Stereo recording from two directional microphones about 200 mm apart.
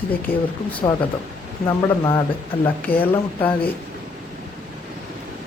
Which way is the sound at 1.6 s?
15° left (ahead or behind).